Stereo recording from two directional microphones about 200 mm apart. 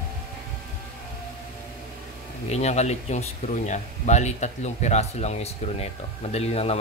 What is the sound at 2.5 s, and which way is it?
Speech, 35° left (ahead or behind).